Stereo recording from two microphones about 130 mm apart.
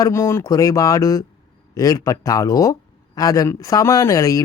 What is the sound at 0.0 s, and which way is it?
Speech, 20° left (ahead or behind).